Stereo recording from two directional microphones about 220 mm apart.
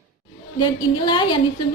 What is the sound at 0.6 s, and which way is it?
Speech, 20° left (ahead or behind).